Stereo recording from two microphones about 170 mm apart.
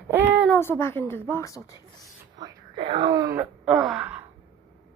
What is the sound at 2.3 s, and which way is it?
Wail, 25° right (ahead or behind).